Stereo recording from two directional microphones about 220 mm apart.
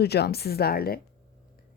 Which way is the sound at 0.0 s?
45° left (ahead or behind).